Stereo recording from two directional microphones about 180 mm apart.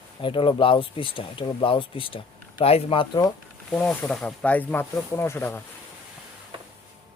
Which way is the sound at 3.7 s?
5° left (ahead or behind).